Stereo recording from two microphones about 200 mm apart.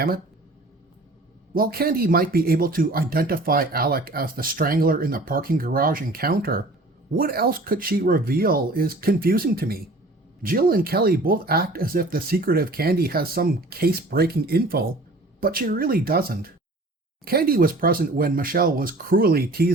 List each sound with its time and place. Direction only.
1.5 s speech: 50° right (ahead or behind)